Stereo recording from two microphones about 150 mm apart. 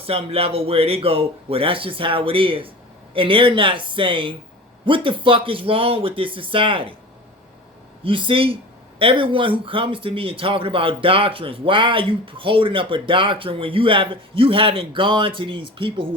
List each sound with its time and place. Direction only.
0.0 s speech: 40° right (ahead or behind)
8.0 s speech: 35° right (ahead or behind)